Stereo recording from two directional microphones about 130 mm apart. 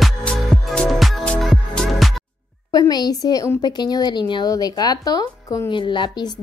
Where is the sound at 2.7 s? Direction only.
30° left (ahead or behind).